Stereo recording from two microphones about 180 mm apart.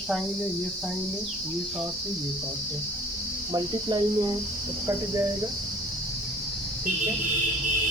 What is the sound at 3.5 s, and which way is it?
Speech, 20° right (ahead or behind).